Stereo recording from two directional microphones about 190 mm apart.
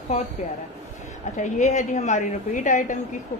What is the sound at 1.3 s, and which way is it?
A woman's voice, 40° left (ahead or behind).